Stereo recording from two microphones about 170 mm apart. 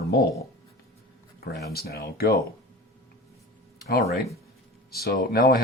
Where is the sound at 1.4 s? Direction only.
70° left (ahead or behind).